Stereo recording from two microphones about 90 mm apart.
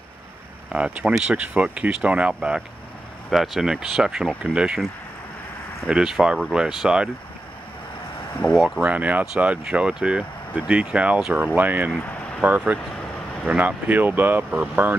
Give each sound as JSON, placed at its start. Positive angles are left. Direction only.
{"t": 0.7, "sound": "speech", "side_deg": -10}
{"t": 5.9, "sound": "speech", "side_deg": -5}
{"t": 8.5, "sound": "speech", "side_deg": -5}
{"t": 8.8, "sound": "speech", "side_deg": -20}
{"t": 11.5, "sound": "speech", "side_deg": -20}
{"t": 12.0, "sound": "a sound", "side_deg": 15}
{"t": 12.4, "sound": "speech", "side_deg": -15}